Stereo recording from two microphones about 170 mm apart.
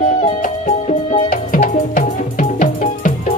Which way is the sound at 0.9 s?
50° left (ahead or behind).